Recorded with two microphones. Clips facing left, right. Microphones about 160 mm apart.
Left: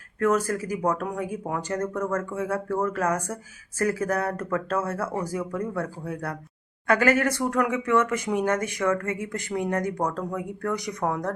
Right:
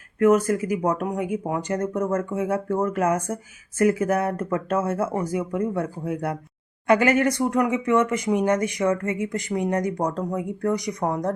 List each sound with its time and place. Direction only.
0.2 s speech: 20° right (ahead or behind)